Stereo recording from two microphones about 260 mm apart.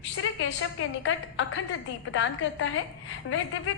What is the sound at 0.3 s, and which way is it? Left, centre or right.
A woman's voice, left.